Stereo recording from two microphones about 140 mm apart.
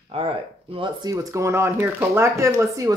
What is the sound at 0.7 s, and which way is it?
Speech, 35° right (ahead or behind).